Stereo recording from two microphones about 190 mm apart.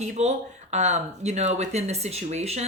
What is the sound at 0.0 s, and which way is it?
Speech, 35° right (ahead or behind).